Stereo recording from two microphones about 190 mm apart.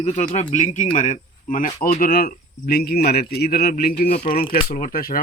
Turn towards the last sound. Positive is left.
turn(degrees=50)  # may be behind; listen again after turning